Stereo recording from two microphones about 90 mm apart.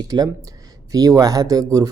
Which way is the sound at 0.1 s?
50° right (ahead or behind).